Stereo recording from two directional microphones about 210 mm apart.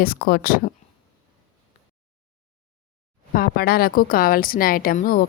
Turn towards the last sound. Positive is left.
turn(degrees=45)  # may be behind; listen again after turning